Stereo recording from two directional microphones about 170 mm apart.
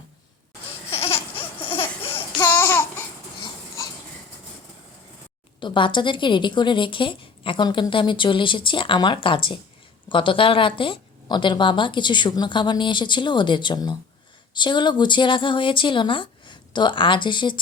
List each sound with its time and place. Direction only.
0.9 s a sound: 35° left (ahead or behind)
1.6 s laughter: 30° left (ahead or behind)
2.6 s babbling: 10° left (ahead or behind)
5.5 s a woman's voice: 30° left (ahead or behind)